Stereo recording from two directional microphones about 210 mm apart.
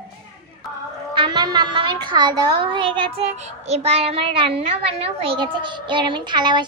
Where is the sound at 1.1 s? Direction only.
20° right (ahead or behind).